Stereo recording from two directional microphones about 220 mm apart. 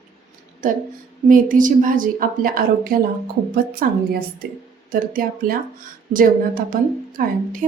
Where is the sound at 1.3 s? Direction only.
35° right (ahead or behind).